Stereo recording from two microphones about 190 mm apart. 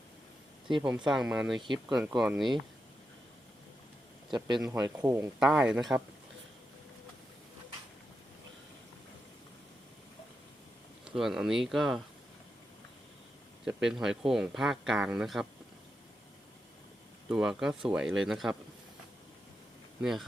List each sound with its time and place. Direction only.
0.7 s speech: 20° right (ahead or behind)
0.9 s speech: 5° right (ahead or behind)
1.5 s speech: 25° right (ahead or behind)
2.0 s speech: 5° right (ahead or behind)
4.4 s speech: 20° right (ahead or behind)
11.0 s speech: centre (ahead or behind)
13.7 s speech: 5° right (ahead or behind)
17.3 s speech: 5° right (ahead or behind)
20.0 s speech: centre (ahead or behind)